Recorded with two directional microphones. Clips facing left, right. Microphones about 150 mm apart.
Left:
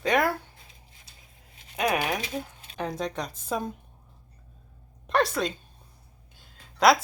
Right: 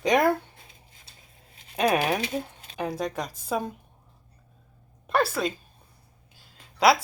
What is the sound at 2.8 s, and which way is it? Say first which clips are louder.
Speech: right 1 dB; 5° right (ahead or behind).